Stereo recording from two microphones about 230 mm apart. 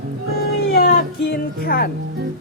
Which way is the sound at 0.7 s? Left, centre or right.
Left.